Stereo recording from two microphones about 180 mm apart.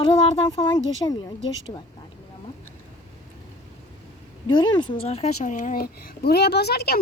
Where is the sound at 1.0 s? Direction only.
20° left (ahead or behind).